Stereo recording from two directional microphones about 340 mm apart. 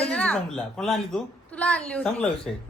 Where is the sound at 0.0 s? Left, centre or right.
Centre.